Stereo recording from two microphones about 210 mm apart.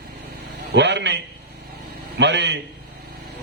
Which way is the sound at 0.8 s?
55° right (ahead or behind).